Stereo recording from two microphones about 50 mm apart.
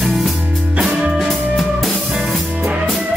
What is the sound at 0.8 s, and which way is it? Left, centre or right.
Music, centre.